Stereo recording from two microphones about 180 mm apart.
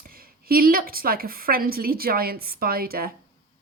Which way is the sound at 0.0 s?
55° right (ahead or behind).